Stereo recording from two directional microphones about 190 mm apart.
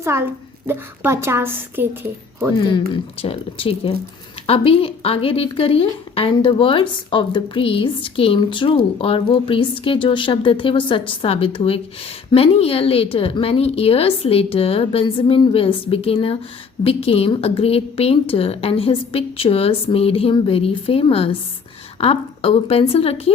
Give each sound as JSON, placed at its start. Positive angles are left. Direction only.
{"t": 0.0, "sound": "a child's voice", "side_deg": -15}
{"t": 2.6, "sound": "a woman's voice", "side_deg": 25}